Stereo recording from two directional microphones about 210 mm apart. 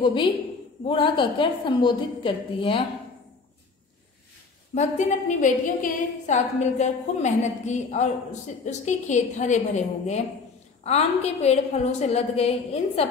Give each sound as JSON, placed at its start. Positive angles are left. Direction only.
{"t": 0.0, "sound": "a woman's voice", "side_deg": 25}
{"t": 4.7, "sound": "a woman's voice", "side_deg": 35}